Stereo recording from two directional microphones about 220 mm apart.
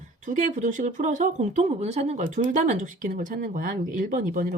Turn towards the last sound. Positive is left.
turn(degrees=-40)  # may be behind; listen again after turning